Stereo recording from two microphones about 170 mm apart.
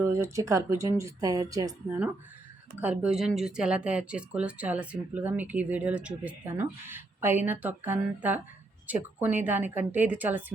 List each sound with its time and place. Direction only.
0.0 s speech: 15° right (ahead or behind)
2.8 s speech: 5° right (ahead or behind)